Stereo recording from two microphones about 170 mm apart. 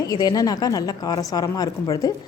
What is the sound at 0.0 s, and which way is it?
A woman's voice, 20° left (ahead or behind).